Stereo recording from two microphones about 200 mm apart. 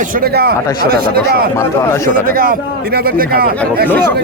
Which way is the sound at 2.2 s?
45° right (ahead or behind).